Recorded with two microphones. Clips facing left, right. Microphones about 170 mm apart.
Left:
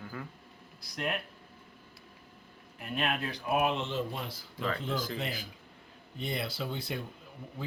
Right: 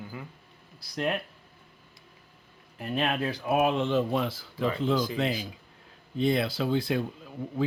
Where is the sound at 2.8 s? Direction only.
35° right (ahead or behind).